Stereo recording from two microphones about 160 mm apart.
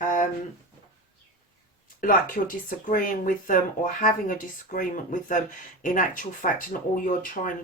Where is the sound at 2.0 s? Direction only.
60° left (ahead or behind).